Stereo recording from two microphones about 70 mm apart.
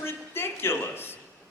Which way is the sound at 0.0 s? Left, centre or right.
Left.